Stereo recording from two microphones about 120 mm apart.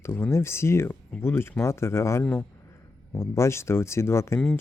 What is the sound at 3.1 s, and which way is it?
Speech, 25° left (ahead or behind).